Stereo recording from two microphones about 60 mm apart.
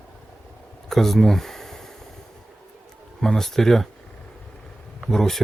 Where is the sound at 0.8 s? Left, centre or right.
Centre.